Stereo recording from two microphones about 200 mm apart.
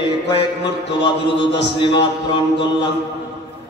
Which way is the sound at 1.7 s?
25° left (ahead or behind).